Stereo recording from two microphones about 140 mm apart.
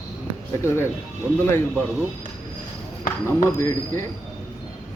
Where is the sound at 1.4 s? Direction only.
20° left (ahead or behind).